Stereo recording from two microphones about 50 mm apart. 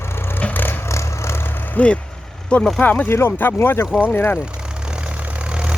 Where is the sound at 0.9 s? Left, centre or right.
Left.